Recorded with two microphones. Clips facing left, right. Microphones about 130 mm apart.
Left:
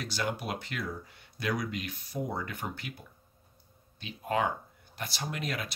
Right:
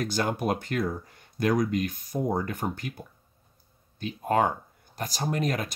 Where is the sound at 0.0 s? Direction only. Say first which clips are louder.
Right 7 dB; 45° right (ahead or behind).